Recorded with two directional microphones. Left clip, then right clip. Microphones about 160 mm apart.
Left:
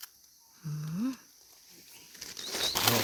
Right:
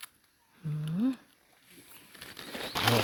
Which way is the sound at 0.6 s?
45° right (ahead or behind).